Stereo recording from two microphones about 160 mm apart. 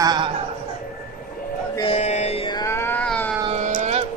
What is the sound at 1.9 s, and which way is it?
Mantra, 45° left (ahead or behind).